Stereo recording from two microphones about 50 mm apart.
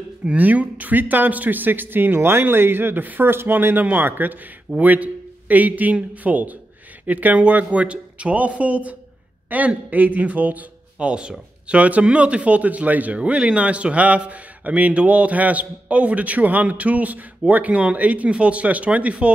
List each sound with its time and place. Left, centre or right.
0.4 s speech: right
2.1 s speech: right
11.0 s speech: right